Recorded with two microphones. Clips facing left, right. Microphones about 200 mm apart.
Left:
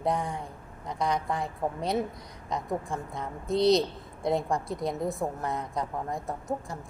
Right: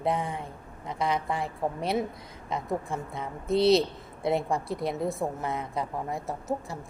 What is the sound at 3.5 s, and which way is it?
Speech, 15° left (ahead or behind).